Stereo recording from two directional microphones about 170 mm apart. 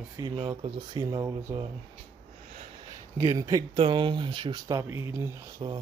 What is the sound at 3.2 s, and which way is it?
Speech, 20° right (ahead or behind).